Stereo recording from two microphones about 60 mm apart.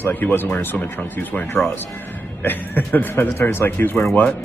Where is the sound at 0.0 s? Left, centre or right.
Left.